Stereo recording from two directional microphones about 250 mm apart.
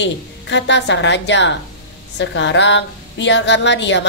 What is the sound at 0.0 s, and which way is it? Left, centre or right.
A woman's voice, left.